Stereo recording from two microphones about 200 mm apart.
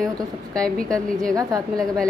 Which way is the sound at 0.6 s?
5° left (ahead or behind).